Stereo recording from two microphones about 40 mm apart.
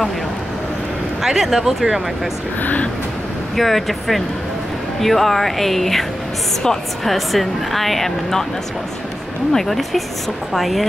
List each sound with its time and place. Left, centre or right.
1.2 s speech: centre
3.5 s a woman's voice: centre
7.1 s a woman's voice: centre
9.5 s a woman's voice: centre